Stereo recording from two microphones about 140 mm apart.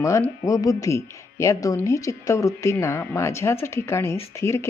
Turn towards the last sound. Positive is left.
turn(degrees=20)  # may be behind; listen again after turning